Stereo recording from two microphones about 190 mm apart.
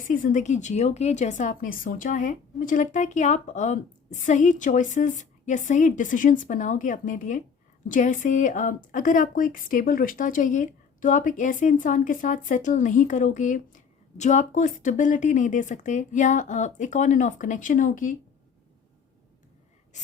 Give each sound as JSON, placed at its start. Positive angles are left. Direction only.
{"t": 0.0, "sound": "a woman's voice", "side_deg": 45}